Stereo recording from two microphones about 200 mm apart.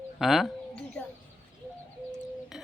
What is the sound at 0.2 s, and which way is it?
Bird, centre (ahead or behind).